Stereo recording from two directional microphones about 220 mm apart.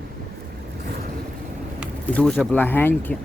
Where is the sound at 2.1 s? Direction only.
Centre (ahead or behind).